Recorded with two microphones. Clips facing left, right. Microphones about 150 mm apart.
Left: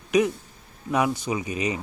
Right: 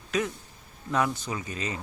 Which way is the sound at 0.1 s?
15° left (ahead or behind).